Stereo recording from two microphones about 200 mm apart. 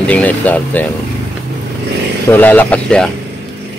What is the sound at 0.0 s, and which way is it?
Speech, 5° left (ahead or behind).